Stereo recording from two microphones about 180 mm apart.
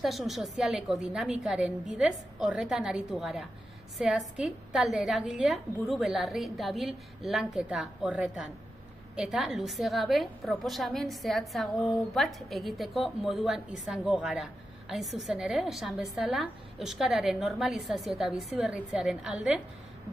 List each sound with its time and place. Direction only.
0.0 s a woman's voice: centre (ahead or behind)